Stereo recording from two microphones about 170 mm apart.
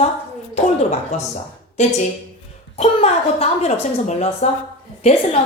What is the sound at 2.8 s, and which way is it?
A woman's voice, 35° left (ahead or behind).